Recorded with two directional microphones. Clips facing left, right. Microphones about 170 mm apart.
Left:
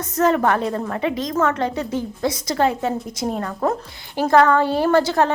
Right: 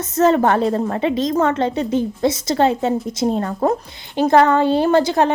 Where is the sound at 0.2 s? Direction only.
25° right (ahead or behind).